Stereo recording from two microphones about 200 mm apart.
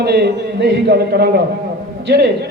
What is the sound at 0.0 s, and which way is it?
A man's voice, 55° right (ahead or behind).